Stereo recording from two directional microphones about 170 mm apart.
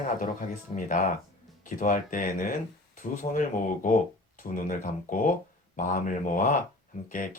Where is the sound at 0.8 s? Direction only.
50° left (ahead or behind).